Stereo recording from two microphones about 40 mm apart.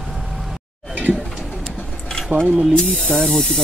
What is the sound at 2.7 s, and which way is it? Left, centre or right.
Speech, left.